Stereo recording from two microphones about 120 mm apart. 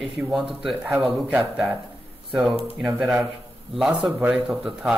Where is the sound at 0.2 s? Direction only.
5° right (ahead or behind).